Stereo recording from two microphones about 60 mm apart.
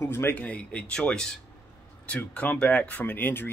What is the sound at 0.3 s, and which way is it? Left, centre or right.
Speech, left.